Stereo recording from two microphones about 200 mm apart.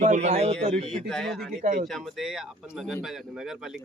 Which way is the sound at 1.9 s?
Centre (ahead or behind).